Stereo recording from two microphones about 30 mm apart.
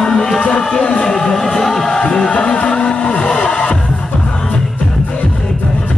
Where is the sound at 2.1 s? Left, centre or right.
Left.